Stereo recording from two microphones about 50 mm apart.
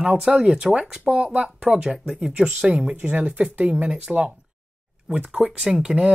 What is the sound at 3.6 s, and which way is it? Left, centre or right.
Speech, centre.